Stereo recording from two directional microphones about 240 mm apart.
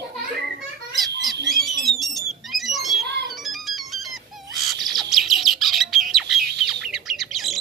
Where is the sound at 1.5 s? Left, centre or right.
Centre.